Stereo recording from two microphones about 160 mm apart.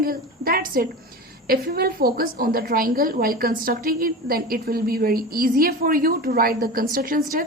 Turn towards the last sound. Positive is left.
turn(degrees=-60)  # may be behind; listen again after turning